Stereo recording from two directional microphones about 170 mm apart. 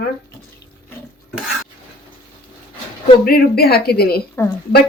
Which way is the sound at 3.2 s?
65° left (ahead or behind).